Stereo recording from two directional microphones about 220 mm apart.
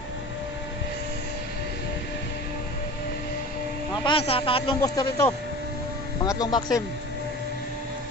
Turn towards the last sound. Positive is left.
turn(degrees=15)  # may be behind; listen again after turning